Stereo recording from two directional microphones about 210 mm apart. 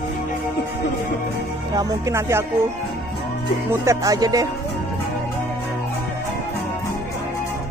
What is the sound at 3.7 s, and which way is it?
Speech, 15° right (ahead or behind).